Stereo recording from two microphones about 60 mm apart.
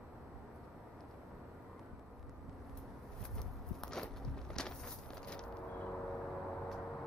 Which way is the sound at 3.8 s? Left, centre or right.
Centre.